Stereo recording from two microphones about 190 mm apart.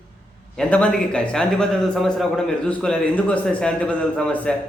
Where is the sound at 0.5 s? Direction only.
5° left (ahead or behind).